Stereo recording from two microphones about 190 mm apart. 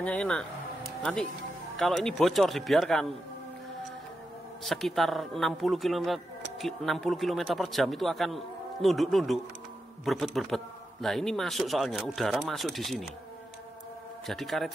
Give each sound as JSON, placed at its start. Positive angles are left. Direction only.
{"t": 0.0, "sound": "speech", "side_deg": 5}
{"t": 1.8, "sound": "speech", "side_deg": 0}
{"t": 4.6, "sound": "speech", "side_deg": 0}
{"t": 14.2, "sound": "speech", "side_deg": 0}